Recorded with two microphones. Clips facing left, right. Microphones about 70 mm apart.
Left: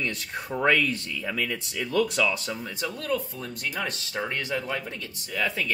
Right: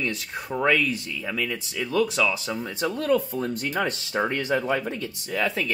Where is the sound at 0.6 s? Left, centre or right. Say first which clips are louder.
Right 1 dB; centre.